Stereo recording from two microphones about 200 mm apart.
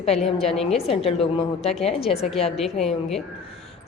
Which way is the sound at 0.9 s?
30° left (ahead or behind).